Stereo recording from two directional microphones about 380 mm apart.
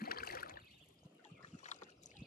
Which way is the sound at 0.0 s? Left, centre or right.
Left.